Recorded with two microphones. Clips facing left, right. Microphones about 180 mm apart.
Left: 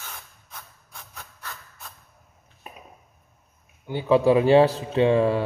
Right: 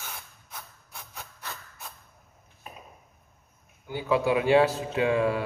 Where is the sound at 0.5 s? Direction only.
10° right (ahead or behind).